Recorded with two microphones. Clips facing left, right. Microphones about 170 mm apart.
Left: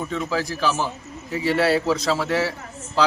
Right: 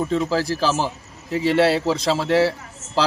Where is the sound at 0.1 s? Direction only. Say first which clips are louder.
Right 4 dB; 35° right (ahead or behind).